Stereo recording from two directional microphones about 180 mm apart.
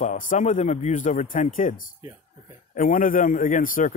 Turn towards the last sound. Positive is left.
turn(degrees=45)  # may be behind; listen again after turning